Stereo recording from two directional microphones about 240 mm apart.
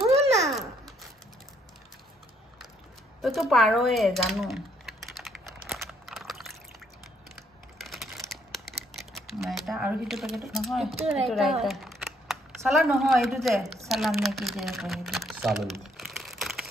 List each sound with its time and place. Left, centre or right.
0.1 s babbling: right
0.5 s babbling: centre
3.2 s speech: centre
5.9 s a sound: centre
7.8 s crumpling: centre
8.9 s speech: centre
11.6 s a sound: centre
12.9 s speech: centre